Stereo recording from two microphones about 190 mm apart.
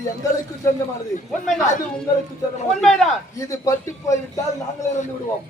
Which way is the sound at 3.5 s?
15° left (ahead or behind).